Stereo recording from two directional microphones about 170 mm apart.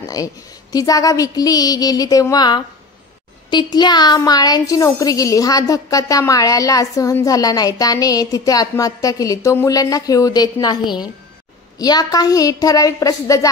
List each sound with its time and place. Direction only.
0.1 s a woman's voice: 20° left (ahead or behind)